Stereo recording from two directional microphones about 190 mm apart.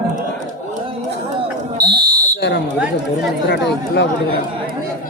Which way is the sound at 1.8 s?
55° right (ahead or behind).